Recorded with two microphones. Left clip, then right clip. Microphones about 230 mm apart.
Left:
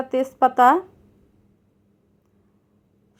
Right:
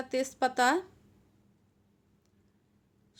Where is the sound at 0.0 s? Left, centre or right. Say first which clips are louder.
Left 11 dB; centre.